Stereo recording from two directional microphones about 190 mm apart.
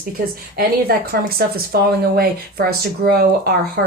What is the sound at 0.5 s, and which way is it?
Speech, 55° right (ahead or behind).